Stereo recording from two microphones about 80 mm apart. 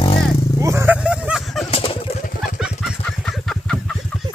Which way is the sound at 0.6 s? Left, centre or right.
Right.